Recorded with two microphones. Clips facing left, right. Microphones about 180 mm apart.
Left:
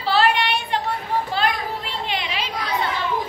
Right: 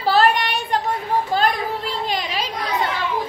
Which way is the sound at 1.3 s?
40° right (ahead or behind).